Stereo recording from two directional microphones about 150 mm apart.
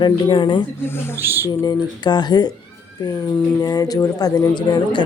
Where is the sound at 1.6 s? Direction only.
25° left (ahead or behind).